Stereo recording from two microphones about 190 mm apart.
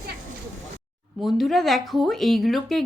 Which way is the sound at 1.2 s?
Centre (ahead or behind).